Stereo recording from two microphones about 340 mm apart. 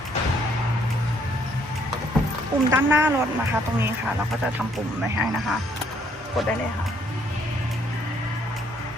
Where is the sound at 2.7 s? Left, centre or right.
Centre.